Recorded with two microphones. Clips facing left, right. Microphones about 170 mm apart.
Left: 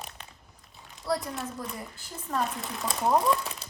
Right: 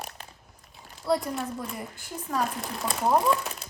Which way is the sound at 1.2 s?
Centre (ahead or behind).